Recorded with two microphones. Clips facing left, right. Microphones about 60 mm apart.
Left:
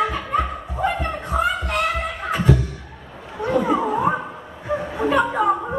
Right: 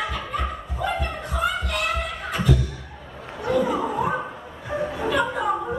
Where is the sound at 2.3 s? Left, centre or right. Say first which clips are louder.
Left 4 dB; left.